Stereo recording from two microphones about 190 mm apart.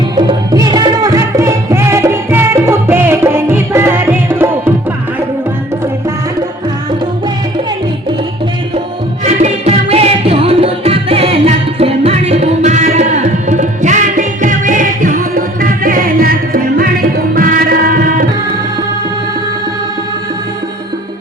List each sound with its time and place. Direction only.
0.2 s music: 20° right (ahead or behind)
9.2 s music: 35° right (ahead or behind)